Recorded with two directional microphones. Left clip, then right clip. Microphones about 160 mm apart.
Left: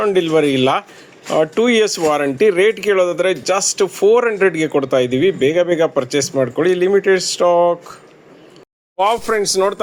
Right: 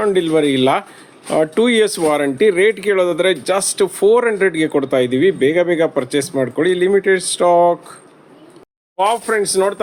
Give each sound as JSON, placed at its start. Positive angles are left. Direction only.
{"t": 0.0, "sound": "speech", "side_deg": -25}
{"t": 9.0, "sound": "speech", "side_deg": 5}